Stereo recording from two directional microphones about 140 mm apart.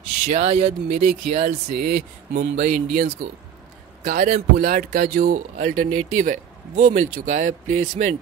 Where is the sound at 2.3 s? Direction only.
90° right; by 7.5 s 60° right (ahead or behind).